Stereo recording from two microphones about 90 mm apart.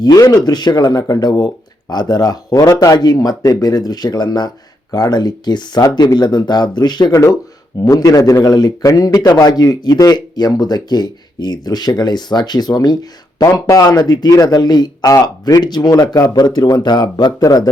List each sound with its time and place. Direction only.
0.0 s a man's voice: 45° left (ahead or behind)